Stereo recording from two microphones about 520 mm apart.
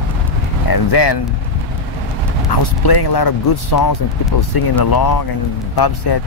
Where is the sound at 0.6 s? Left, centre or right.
Left.